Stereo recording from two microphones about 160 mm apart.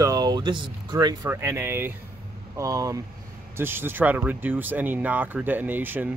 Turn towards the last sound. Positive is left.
turn(degrees=-10)  # may be behind; listen again after turning